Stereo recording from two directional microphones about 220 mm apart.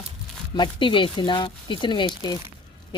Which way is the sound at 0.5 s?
20° left (ahead or behind).